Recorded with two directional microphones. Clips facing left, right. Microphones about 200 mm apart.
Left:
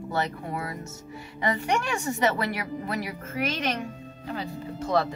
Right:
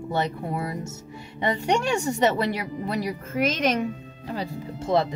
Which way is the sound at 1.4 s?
30° right (ahead or behind).